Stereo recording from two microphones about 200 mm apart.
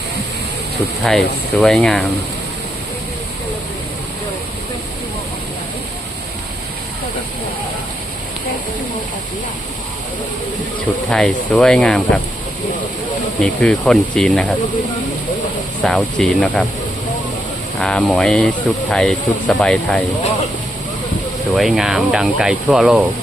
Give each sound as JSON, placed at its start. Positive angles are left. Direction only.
{"t": 1.0, "sound": "speech", "side_deg": 0}
{"t": 11.1, "sound": "speech", "side_deg": 5}
{"t": 13.4, "sound": "speech", "side_deg": 5}
{"t": 15.8, "sound": "speech", "side_deg": 5}
{"t": 17.7, "sound": "speech", "side_deg": 5}
{"t": 21.5, "sound": "speech", "side_deg": 0}